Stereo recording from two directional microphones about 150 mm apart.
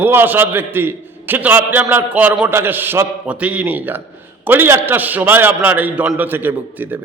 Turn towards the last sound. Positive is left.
turn(degrees=-15)  # may be behind; listen again after turning